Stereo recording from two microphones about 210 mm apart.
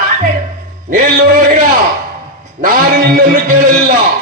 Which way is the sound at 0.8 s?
40° right (ahead or behind).